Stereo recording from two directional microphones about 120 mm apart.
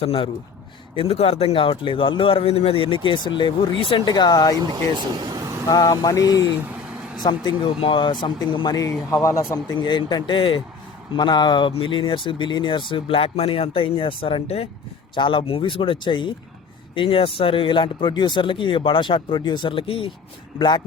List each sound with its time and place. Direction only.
0.0 s speech: 55° left (ahead or behind); by 4.5 s 35° left (ahead or behind)
4.5 s speech: 35° right (ahead or behind)
5.6 s speech: 30° left (ahead or behind)
9.8 s speech: 40° left (ahead or behind); by 14.7 s 55° left (ahead or behind)
15.1 s speech: 45° left (ahead or behind)
20.6 s speech: 35° left (ahead or behind)